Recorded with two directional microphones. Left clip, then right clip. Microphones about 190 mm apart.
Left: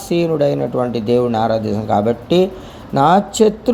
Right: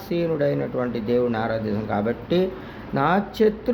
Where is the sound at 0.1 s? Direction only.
25° left (ahead or behind).